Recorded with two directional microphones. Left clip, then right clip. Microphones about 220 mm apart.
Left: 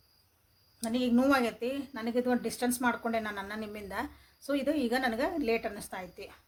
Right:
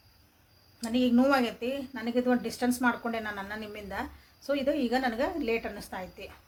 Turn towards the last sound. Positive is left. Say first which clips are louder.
# right 2 dB
turn(degrees=40)  # may be behind; listen again after turning